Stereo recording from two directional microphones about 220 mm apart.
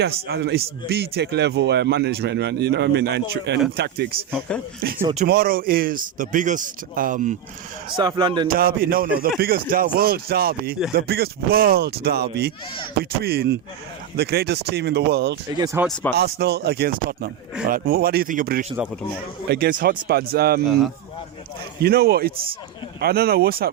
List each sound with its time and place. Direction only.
0.3 s a man's voice: 45° right (ahead or behind)
7.9 s a man's voice: 20° right (ahead or behind)
8.4 s a man's voice: 40° right (ahead or behind)
15.5 s speech: 15° right (ahead or behind)
16.1 s a man's voice: 45° right (ahead or behind)
20.7 s speech: centre (ahead or behind)
21.8 s a man's voice: 45° right (ahead or behind)